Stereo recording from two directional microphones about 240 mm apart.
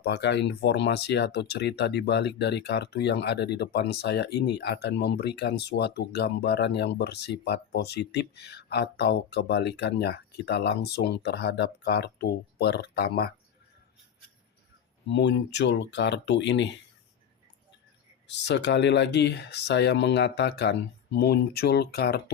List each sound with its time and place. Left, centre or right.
0.0 s speech: left
15.0 s speech: left
18.3 s speech: left